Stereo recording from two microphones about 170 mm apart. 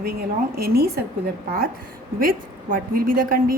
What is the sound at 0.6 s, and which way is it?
Speech, 65° right (ahead or behind).